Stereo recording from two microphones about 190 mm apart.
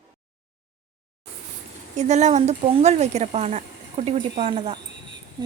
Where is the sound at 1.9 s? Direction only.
40° right (ahead or behind).